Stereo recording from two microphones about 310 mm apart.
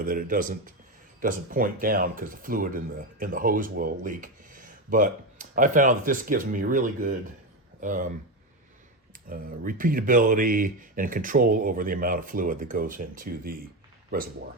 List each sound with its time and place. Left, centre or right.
0.0 s speech: right
9.3 s speech: right